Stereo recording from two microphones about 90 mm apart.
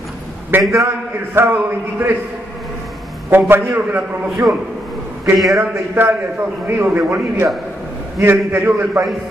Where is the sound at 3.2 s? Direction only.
25° right (ahead or behind).